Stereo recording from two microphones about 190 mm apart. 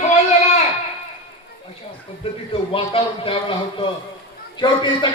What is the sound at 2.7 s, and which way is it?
Speech, 30° left (ahead or behind).